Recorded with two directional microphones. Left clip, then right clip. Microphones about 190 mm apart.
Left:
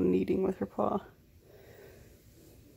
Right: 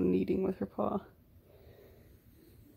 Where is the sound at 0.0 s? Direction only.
5° left (ahead or behind).